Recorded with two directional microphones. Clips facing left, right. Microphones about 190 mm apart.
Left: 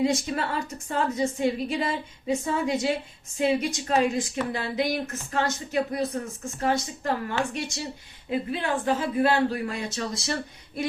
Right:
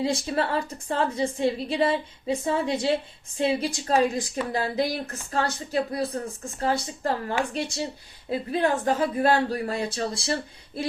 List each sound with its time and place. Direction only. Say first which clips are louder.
0.0 s a woman's voice: even; 30° right (ahead or behind)